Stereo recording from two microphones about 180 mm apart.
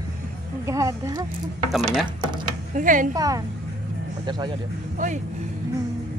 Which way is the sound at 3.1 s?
20° right (ahead or behind).